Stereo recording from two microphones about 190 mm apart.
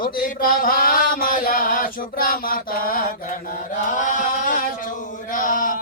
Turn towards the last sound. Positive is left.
turn(degrees=45)  # may be behind; listen again after turning